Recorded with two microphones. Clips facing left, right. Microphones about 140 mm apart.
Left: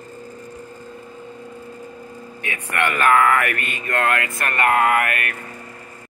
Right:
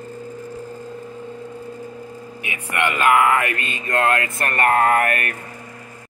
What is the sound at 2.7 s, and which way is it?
Speech, 15° right (ahead or behind).